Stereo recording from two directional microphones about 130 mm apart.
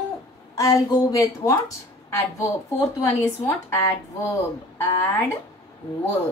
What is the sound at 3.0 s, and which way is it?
A woman's voice, 20° left (ahead or behind).